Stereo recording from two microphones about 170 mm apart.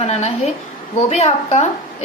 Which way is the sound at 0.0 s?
40° left (ahead or behind).